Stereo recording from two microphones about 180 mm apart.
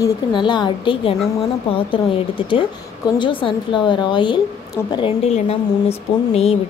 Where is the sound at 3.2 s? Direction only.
30° left (ahead or behind).